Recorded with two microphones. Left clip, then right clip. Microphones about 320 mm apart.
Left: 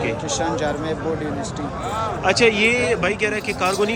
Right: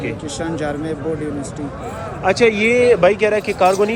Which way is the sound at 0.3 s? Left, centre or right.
Right.